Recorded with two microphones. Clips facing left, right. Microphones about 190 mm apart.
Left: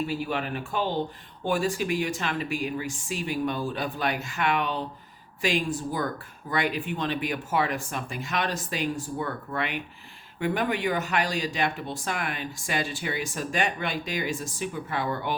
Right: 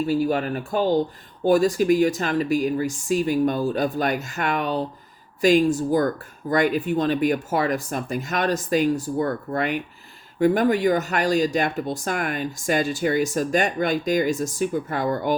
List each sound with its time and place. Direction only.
0.1 s speech: 40° right (ahead or behind)